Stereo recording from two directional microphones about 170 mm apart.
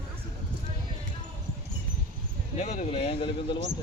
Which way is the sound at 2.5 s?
40° left (ahead or behind).